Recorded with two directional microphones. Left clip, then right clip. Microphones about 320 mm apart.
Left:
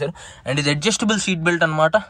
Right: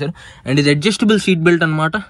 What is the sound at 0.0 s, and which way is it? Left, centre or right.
Speech, centre.